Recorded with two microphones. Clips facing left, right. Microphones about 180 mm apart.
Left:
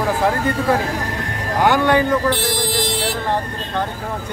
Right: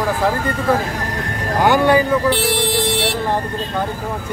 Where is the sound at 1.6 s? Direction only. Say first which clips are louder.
Right 2 dB; 5° right (ahead or behind).